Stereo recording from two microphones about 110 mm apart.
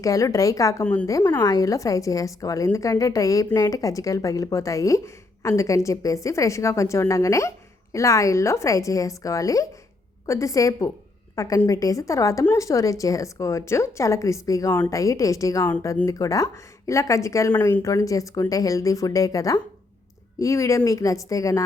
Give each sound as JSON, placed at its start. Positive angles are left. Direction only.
{"t": 0.0, "sound": "a woman's voice", "side_deg": 30}
{"t": 17.5, "sound": "speech", "side_deg": 15}
{"t": 17.8, "sound": "a woman's voice", "side_deg": 30}